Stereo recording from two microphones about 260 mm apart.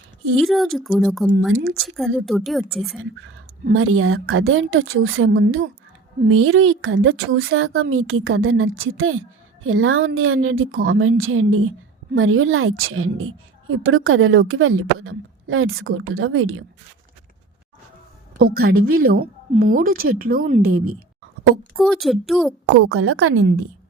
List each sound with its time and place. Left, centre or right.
0.3 s speech: centre
3.8 s a woman's voice: right
18.3 s a woman's voice: right
21.8 s speech: centre
22.6 s a woman's voice: right